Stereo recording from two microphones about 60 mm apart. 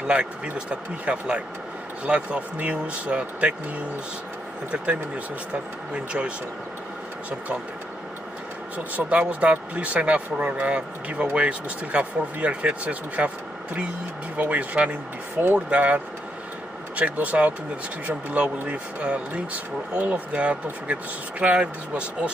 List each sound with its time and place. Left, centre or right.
0.1 s speech: centre
8.7 s speech: right
14.3 s speech: right